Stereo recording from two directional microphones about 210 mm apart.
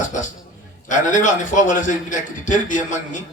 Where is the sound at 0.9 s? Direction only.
35° left (ahead or behind).